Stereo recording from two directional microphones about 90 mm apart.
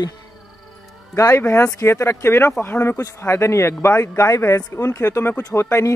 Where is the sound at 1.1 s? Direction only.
35° left (ahead or behind).